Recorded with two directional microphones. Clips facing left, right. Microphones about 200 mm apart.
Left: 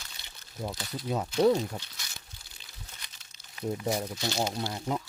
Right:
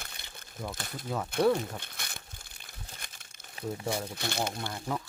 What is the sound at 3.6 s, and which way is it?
Speech, 30° right (ahead or behind).